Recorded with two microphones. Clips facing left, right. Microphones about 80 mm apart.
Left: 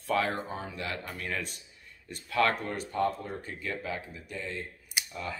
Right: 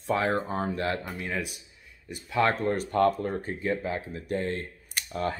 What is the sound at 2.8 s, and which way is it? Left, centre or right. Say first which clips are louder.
Speech: right 6 dB; right.